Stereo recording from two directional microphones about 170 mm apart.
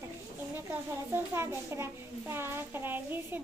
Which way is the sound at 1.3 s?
15° right (ahead or behind).